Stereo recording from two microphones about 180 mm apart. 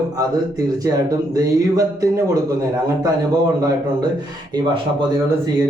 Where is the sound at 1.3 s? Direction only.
20° right (ahead or behind).